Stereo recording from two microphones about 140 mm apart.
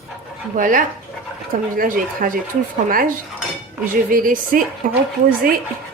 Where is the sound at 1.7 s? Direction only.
80° right.